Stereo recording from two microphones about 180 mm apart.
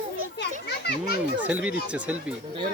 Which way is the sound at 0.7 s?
65° left (ahead or behind).